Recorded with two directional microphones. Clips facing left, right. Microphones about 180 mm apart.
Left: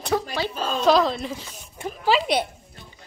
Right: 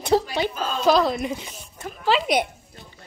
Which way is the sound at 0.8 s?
5° right (ahead or behind).